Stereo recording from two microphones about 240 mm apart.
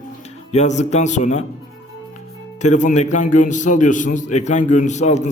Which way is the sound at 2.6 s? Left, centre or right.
Left.